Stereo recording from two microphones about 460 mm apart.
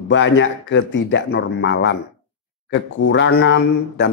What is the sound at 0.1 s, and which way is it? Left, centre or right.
Speech, left.